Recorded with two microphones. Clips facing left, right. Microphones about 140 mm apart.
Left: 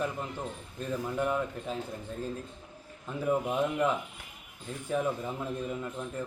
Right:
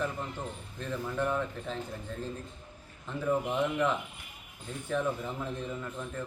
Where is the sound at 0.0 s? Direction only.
10° left (ahead or behind).